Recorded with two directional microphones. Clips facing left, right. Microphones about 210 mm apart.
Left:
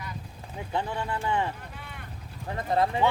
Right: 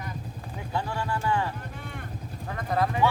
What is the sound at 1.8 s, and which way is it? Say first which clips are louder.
Vehicle: right 5 dB; 50° right (ahead or behind).